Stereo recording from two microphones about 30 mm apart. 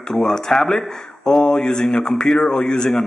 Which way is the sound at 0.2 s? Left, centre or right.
Left.